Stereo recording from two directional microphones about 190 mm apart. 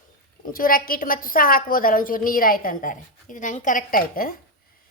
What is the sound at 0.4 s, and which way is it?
A woman's voice, 50° left (ahead or behind).